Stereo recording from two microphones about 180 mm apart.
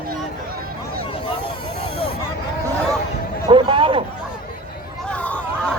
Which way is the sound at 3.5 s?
30° right (ahead or behind).